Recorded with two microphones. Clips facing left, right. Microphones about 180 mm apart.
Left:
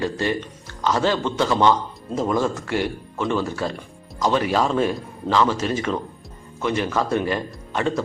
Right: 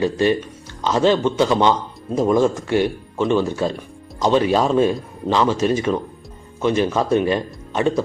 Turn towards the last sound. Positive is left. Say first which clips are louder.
# right 4 dB
turn(degrees=-20)  # may be behind; listen again after turning